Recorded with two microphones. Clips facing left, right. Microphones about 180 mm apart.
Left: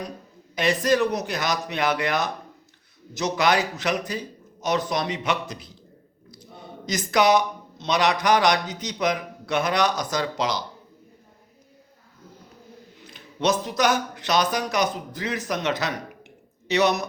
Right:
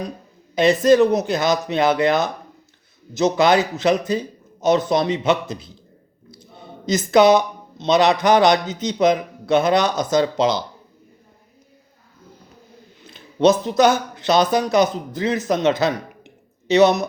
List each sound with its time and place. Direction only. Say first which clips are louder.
0.5 s speech: right 8 dB; 25° right (ahead or behind)
13.1 s speech: right 8 dB; 25° right (ahead or behind)